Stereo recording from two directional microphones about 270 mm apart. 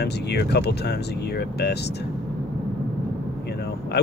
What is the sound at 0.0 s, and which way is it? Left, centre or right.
Speech, left.